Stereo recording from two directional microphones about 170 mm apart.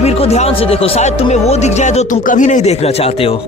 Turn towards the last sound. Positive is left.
turn(degrees=35)  # may be behind; listen again after turning